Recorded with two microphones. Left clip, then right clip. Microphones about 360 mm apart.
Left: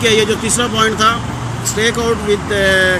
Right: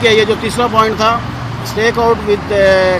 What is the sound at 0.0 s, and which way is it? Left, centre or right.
Speech, centre.